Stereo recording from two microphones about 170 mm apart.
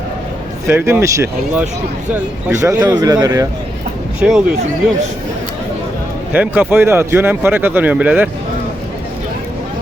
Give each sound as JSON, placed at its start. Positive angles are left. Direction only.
{"t": 0.7, "sound": "speech", "side_deg": -15}
{"t": 2.8, "sound": "speech", "side_deg": -20}
{"t": 4.2, "sound": "speech", "side_deg": -5}
{"t": 6.3, "sound": "speech", "side_deg": -10}